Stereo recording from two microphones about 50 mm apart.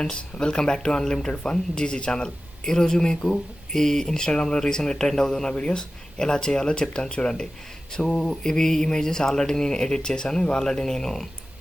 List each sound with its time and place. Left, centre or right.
0.0 s speech: centre